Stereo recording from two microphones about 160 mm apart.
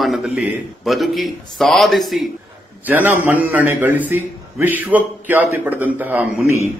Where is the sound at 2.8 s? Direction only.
10° right (ahead or behind).